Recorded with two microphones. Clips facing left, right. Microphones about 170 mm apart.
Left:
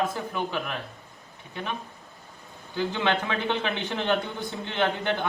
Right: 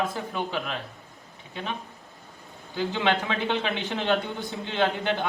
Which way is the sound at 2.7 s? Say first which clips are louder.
Right 1 dB; 20° right (ahead or behind).